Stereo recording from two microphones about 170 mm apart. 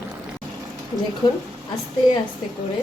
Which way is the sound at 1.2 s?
25° left (ahead or behind).